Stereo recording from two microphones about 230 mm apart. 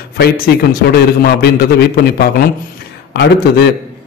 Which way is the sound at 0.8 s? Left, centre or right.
Left.